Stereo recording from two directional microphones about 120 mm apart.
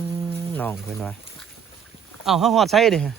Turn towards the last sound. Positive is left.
turn(degrees=5)  # may be behind; listen again after turning